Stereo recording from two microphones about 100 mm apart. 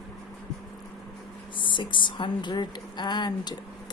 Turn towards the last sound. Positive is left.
turn(degrees=45)  # may be behind; listen again after turning